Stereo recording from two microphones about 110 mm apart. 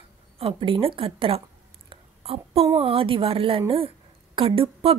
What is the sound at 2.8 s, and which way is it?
A woman's voice, 55° right (ahead or behind).